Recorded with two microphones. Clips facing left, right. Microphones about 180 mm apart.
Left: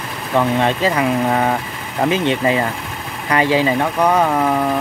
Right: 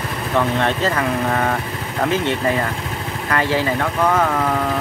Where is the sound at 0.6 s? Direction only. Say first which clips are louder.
Left 3 dB; 15° left (ahead or behind).